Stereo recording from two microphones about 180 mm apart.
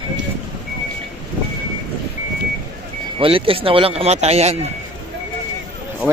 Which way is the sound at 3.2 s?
30° right (ahead or behind).